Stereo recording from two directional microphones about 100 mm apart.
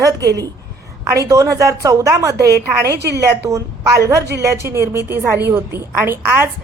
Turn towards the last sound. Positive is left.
turn(degrees=-25)  # may be behind; listen again after turning